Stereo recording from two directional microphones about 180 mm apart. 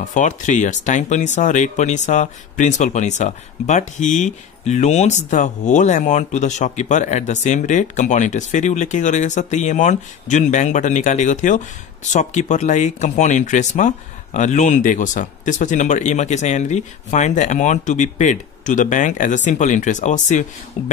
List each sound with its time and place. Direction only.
0.1 s speech: 45° left (ahead or behind)